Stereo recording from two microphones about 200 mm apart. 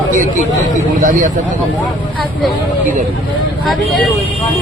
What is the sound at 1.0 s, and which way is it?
Speech, 40° right (ahead or behind).